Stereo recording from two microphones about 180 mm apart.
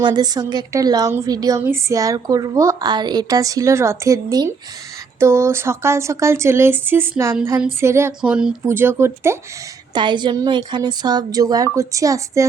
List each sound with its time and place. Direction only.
0.0 s a woman's voice: 25° right (ahead or behind)
9.9 s a woman's voice: 25° right (ahead or behind)